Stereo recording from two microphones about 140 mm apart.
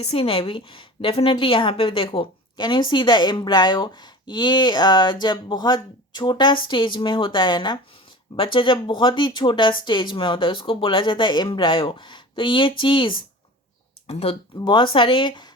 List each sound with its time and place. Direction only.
0.0 s speech: 45° left (ahead or behind)
14.1 s speech: 45° left (ahead or behind)
14.6 s speech: 35° left (ahead or behind)